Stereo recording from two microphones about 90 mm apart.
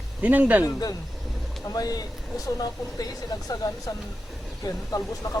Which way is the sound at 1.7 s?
45° left (ahead or behind).